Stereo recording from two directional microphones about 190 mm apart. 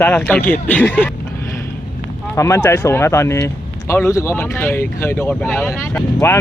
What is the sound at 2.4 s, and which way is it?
Speech, 15° left (ahead or behind).